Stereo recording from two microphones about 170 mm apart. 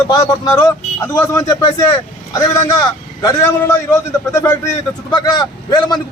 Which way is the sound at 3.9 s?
15° left (ahead or behind).